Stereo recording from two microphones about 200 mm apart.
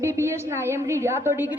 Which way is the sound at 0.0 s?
15° right (ahead or behind).